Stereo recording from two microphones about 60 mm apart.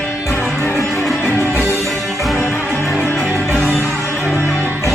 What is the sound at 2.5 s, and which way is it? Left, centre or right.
Music, left.